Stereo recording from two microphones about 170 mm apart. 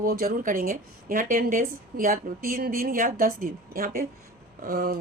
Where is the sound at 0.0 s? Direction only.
60° right (ahead or behind).